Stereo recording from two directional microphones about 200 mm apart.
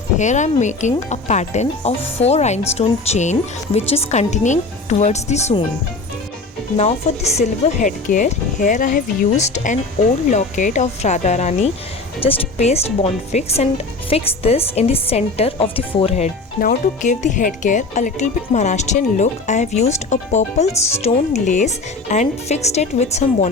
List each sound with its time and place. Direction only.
0.2 s speech: 35° left (ahead or behind)
6.7 s speech: 35° left (ahead or behind)